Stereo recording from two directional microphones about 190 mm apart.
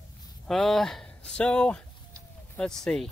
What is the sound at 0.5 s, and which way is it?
Speech, centre (ahead or behind).